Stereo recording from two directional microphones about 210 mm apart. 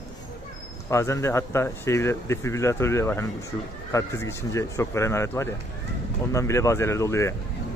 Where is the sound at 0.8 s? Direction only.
15° left (ahead or behind).